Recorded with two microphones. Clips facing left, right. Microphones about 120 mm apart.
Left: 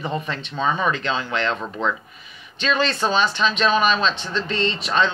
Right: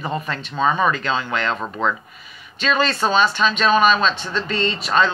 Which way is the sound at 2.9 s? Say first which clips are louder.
Right 2 dB; 35° right (ahead or behind).